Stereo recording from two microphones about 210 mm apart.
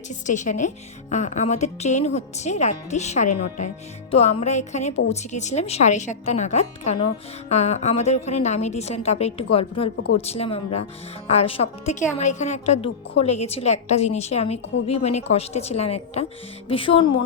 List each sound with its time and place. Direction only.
0.1 s a woman's voice: 35° left (ahead or behind)